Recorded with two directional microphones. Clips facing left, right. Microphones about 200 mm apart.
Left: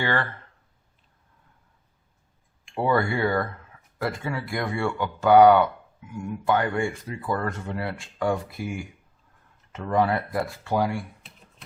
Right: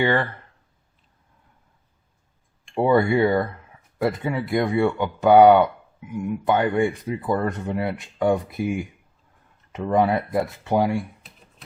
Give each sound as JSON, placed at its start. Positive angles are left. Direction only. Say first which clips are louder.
{"t": 0.0, "sound": "speech", "louder": "right 5 dB", "side_deg": -15}
{"t": 2.8, "sound": "speech", "louder": "right 5 dB", "side_deg": -20}